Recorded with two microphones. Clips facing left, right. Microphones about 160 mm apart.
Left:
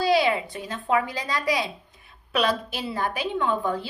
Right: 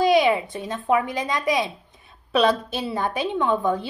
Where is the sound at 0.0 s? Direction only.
15° right (ahead or behind).